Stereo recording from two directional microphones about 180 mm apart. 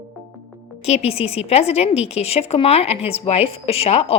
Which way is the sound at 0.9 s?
35° left (ahead or behind).